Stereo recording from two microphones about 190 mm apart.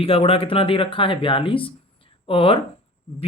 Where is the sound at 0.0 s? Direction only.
30° left (ahead or behind).